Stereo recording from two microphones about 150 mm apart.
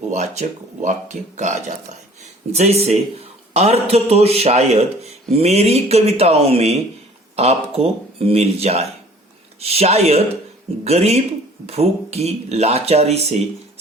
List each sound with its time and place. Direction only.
0.1 s a man's voice: 50° right (ahead or behind)